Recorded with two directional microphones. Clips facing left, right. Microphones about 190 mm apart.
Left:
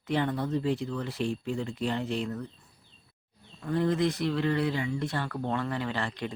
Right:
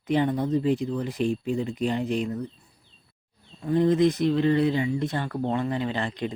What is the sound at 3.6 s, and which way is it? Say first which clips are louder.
Speech: right 6 dB; 20° right (ahead or behind).